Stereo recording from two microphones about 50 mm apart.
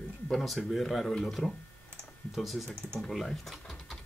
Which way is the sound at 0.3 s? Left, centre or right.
Centre.